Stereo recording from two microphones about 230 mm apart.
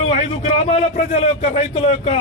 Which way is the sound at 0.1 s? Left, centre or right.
Left.